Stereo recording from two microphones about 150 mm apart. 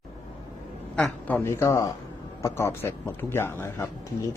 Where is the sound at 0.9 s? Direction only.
10° left (ahead or behind).